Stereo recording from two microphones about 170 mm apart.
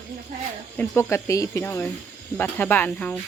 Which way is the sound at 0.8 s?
15° left (ahead or behind).